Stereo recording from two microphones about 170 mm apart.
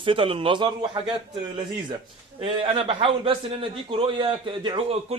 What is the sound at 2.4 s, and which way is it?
A man's voice, 30° right (ahead or behind).